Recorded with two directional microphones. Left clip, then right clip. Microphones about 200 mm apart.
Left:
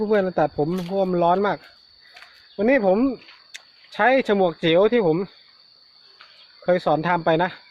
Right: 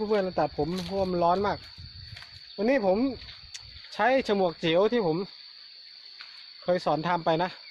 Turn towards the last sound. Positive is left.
turn(degrees=-5)  # may be behind; listen again after turning